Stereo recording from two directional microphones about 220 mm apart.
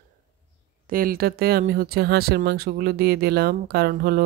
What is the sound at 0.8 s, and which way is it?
Speech, 40° right (ahead or behind).